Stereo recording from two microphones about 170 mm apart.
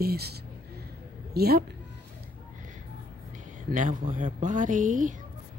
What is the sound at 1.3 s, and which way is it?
Music, 65° right (ahead or behind).